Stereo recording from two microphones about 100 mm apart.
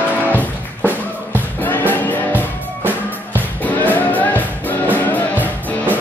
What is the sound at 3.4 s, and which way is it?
Music, 15° left (ahead or behind).